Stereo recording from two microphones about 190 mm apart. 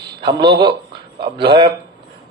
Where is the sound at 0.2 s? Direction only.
25° right (ahead or behind).